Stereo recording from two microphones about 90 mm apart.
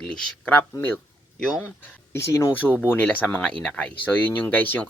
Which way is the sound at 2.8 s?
20° left (ahead or behind).